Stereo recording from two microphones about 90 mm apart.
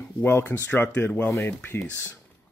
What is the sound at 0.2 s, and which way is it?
Speech, 25° left (ahead or behind).